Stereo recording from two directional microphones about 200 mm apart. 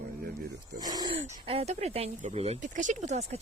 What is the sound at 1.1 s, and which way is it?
Speech, 30° right (ahead or behind).